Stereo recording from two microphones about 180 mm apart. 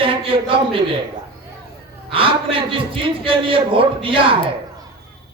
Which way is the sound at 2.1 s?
30° right (ahead or behind).